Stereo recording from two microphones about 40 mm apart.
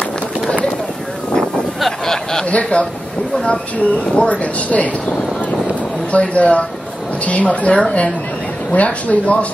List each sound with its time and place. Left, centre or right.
1.8 s a sound: centre
2.5 s a man's voice: left
6.1 s a woman's voice: left